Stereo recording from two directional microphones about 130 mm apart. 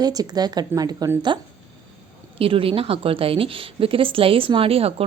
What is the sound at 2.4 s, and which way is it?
A woman's voice, 45° right (ahead or behind).